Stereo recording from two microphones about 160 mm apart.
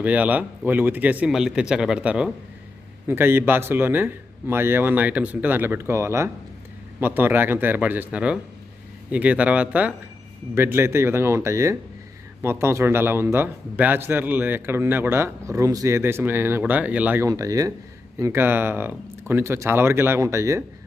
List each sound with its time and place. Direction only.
0.0 s a man's voice: 10° right (ahead or behind)
17.2 s a man's voice: 20° right (ahead or behind)